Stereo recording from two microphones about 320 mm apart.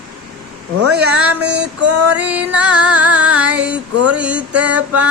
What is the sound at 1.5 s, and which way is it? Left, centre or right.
Female singing, right.